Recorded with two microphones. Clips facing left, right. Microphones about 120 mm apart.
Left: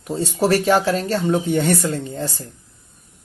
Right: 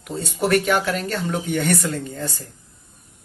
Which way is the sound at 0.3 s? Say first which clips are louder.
Left 2 dB; 30° left (ahead or behind).